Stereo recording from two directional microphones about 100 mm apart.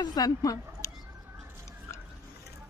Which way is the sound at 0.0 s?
40° left (ahead or behind).